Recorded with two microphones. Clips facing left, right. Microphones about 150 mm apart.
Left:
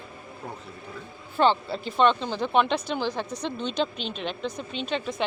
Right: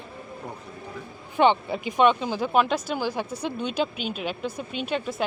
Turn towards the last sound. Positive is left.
turn(degrees=-10)  # may be behind; listen again after turning